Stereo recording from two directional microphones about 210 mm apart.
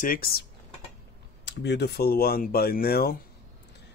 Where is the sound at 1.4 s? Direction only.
55° left (ahead or behind).